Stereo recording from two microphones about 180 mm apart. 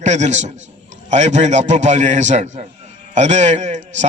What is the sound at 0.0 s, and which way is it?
A man's voice, 40° right (ahead or behind).